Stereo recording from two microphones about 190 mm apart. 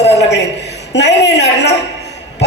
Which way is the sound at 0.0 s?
65° left (ahead or behind).